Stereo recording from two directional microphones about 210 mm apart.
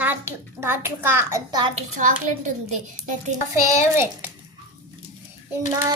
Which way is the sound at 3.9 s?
10° right (ahead or behind).